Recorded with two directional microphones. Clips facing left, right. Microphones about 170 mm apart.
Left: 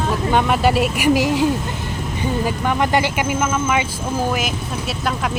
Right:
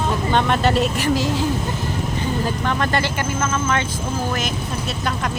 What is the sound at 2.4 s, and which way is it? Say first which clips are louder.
Speech: left 2 dB; 10° left (ahead or behind).